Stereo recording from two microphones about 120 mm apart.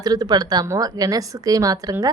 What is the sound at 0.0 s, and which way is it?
A woman's voice, 35° right (ahead or behind).